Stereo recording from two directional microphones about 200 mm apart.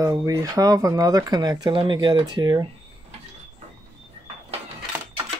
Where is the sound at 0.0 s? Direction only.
15° right (ahead or behind).